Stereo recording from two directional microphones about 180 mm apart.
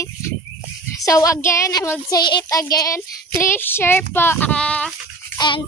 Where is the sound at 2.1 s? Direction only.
25° left (ahead or behind).